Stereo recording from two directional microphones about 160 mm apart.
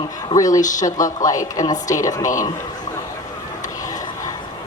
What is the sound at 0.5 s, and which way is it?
Speech, 50° left (ahead or behind).